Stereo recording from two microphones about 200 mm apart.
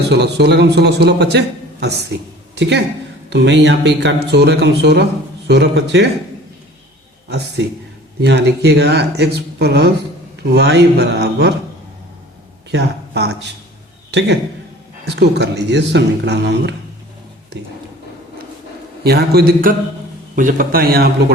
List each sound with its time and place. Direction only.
0.1 s a man's voice: 55° right (ahead or behind)
7.3 s a man's voice: 55° right (ahead or behind)
12.7 s a man's voice: 55° right (ahead or behind)
19.0 s speech: 55° right (ahead or behind)